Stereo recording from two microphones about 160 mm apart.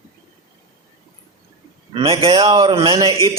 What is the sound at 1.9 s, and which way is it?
A man's voice, 35° right (ahead or behind).